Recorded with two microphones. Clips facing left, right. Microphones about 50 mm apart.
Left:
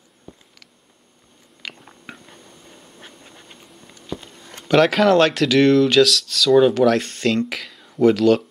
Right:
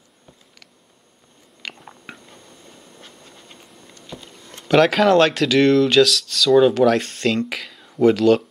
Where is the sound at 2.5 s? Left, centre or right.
Centre.